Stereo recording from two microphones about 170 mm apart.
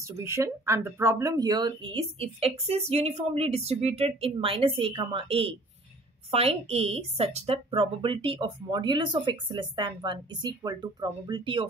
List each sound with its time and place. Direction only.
0.0 s speech: 15° right (ahead or behind)